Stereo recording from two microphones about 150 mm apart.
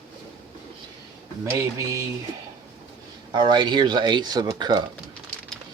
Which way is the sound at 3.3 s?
30° right (ahead or behind).